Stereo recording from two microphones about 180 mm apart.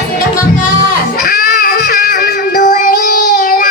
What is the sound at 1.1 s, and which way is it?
Child singing, 55° left (ahead or behind).